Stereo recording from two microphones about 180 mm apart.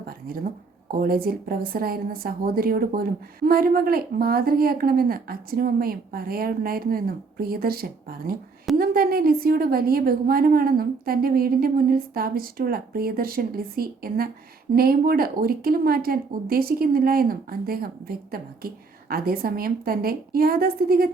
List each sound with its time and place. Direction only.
0.0 s a woman's voice: 55° right (ahead or behind)